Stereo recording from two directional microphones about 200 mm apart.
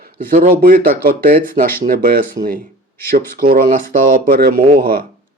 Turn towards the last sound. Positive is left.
turn(degrees=-45)  # may be behind; listen again after turning